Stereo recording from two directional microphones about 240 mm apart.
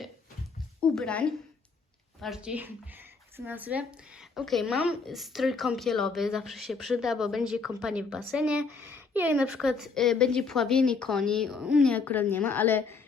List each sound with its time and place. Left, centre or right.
0.8 s a woman's voice: centre